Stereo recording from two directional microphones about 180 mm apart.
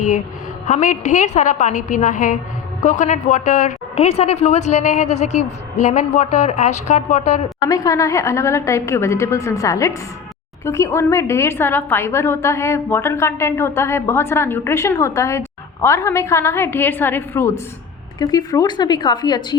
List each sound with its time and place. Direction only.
0.7 s a woman's voice: 45° left (ahead or behind)
7.7 s a woman's voice: 20° left (ahead or behind)